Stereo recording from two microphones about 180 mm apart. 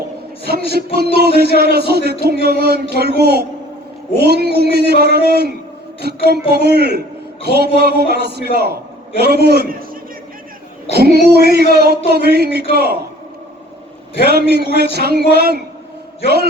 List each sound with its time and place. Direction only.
0.4 s a man's voice: 60° right (ahead or behind)
10.9 s a man's voice: 60° right (ahead or behind)
14.8 s a man's voice: 65° right (ahead or behind)